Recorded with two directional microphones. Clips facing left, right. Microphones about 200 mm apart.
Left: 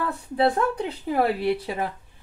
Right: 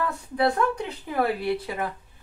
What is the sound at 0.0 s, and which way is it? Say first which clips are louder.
Speech: left 2 dB; 30° left (ahead or behind).